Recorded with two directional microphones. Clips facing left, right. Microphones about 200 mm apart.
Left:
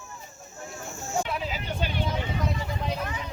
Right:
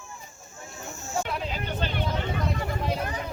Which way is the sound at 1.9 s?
55° right (ahead or behind).